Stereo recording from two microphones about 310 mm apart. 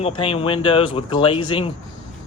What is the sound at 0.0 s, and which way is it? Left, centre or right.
Speech, centre.